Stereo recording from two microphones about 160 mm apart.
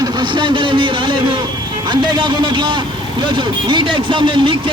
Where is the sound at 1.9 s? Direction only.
30° right (ahead or behind).